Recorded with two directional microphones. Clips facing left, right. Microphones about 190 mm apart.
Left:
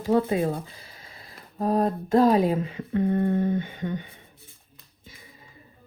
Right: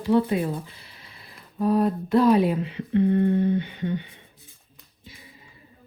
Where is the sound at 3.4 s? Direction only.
45° left (ahead or behind).